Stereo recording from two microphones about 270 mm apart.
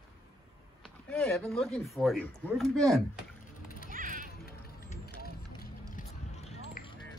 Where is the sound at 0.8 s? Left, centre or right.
Centre.